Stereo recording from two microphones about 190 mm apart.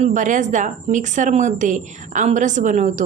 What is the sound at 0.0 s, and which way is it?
A woman's voice, 40° right (ahead or behind).